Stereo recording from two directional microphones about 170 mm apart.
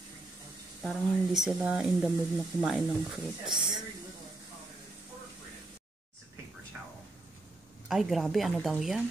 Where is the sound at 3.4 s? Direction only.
5° right (ahead or behind).